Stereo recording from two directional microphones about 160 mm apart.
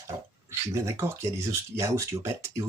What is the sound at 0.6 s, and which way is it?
Speech, 20° right (ahead or behind).